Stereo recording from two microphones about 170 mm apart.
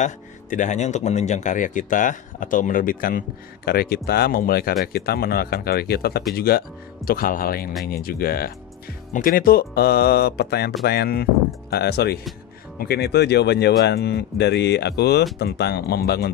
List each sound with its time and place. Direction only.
0.0 s speech: 45° left (ahead or behind); by 16.3 s 70° left (ahead or behind)